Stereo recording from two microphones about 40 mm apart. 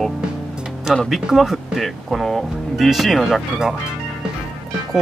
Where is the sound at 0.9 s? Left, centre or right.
Centre.